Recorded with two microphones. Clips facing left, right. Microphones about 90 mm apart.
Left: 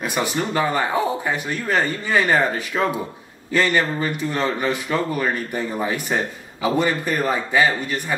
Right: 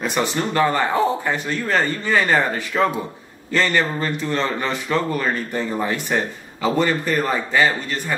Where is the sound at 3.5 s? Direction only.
15° left (ahead or behind).